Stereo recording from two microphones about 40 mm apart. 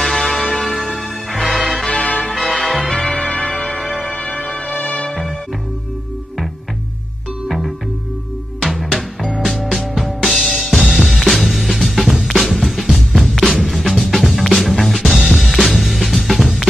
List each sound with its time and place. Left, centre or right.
0.0 s music: centre
1.9 s music: left
2.3 s change ringing: centre
2.9 s music: centre
9.4 s music: centre